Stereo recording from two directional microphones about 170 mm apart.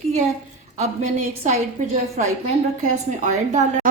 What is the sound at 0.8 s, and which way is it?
Speech, 45° right (ahead or behind).